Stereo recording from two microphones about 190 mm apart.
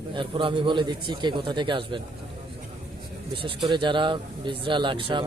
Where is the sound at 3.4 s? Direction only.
25° right (ahead or behind).